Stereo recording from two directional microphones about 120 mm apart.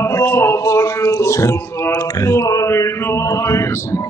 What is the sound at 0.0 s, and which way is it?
Music, 20° left (ahead or behind).